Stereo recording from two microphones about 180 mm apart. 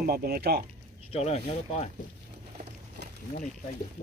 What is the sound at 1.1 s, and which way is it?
Speech, 35° left (ahead or behind).